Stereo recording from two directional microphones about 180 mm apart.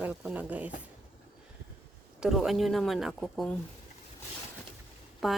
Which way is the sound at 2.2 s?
Centre (ahead or behind).